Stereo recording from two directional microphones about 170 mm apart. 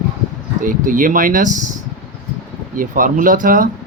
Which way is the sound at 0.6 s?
50° right (ahead or behind).